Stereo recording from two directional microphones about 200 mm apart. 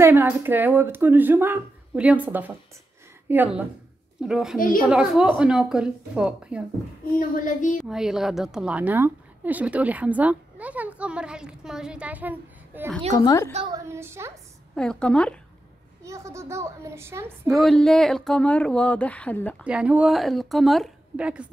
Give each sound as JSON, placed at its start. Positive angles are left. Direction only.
{"t": 0.0, "sound": "a woman's voice", "side_deg": -10}
{"t": 7.2, "sound": "a child's voice", "side_deg": 40}
{"t": 7.7, "sound": "a woman's voice", "side_deg": 0}
{"t": 13.1, "sound": "a woman's voice", "side_deg": 15}
{"t": 13.7, "sound": "a woman's voice", "side_deg": -15}
{"t": 14.8, "sound": "speech", "side_deg": 5}
{"t": 16.0, "sound": "a woman's voice", "side_deg": -15}
{"t": 17.5, "sound": "speech", "side_deg": 0}
{"t": 19.6, "sound": "speech", "side_deg": -5}